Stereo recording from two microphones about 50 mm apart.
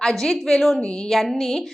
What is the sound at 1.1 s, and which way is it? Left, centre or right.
Speech, centre.